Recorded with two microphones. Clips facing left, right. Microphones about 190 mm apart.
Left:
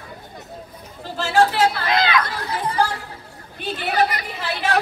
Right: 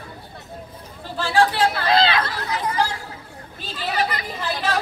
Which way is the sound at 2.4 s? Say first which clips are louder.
Even; 30° left (ahead or behind).